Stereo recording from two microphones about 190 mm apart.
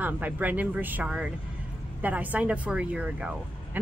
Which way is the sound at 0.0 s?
10° right (ahead or behind).